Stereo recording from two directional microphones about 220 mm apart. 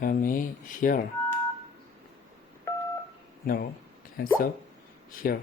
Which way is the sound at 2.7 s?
15° left (ahead or behind).